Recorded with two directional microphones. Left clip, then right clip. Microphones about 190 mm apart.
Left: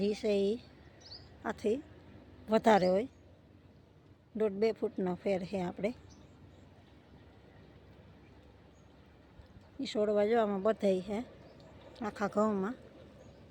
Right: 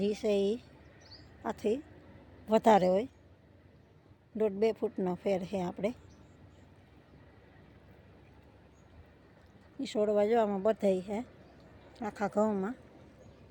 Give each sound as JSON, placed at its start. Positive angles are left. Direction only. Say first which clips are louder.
{"t": 0.0, "sound": "speech", "louder": "right 1 dB", "side_deg": -15}
{"t": 4.4, "sound": "speech", "louder": "right 1 dB", "side_deg": -15}
{"t": 9.8, "sound": "speech", "louder": "right 1 dB", "side_deg": -15}